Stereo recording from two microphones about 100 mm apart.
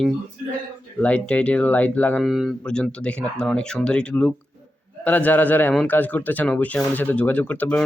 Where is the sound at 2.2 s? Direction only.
5° right (ahead or behind).